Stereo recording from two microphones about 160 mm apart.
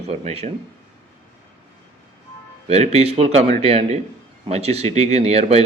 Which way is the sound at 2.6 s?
40° right (ahead or behind).